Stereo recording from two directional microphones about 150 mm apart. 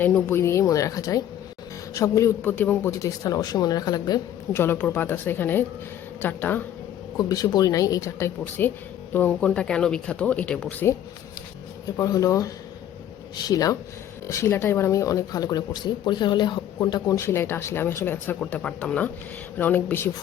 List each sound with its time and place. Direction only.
0.0 s speech: 15° left (ahead or behind)
4.5 s speech: 15° left (ahead or behind)
7.2 s speech: 25° left (ahead or behind)
11.9 s speech: 25° left (ahead or behind)